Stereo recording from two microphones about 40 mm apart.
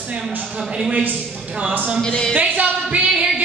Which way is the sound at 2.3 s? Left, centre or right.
Right.